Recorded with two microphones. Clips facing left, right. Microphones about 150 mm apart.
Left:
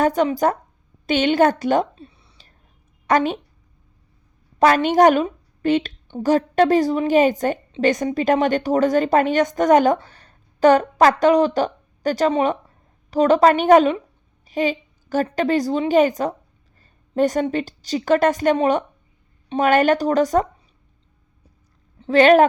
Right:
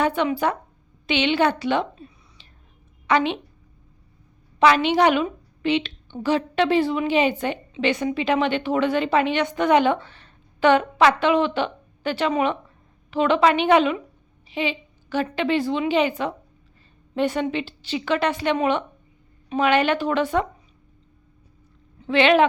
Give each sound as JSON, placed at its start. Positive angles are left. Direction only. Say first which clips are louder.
{"t": 0.0, "sound": "a woman's voice", "louder": "left 4 dB", "side_deg": 40}
{"t": 2.0, "sound": "a sound", "louder": "left 1 dB", "side_deg": 30}
{"t": 3.1, "sound": "speech", "louder": "left 2 dB", "side_deg": 45}
{"t": 4.6, "sound": "a woman's voice", "louder": "left 3 dB", "side_deg": 45}
{"t": 22.0, "sound": "speech", "louder": "left 5 dB", "side_deg": 40}